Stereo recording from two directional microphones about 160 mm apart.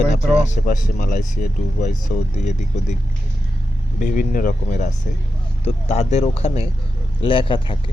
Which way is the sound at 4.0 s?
55° left (ahead or behind).